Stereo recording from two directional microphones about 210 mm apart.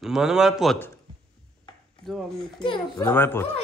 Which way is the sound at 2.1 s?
Centre (ahead or behind).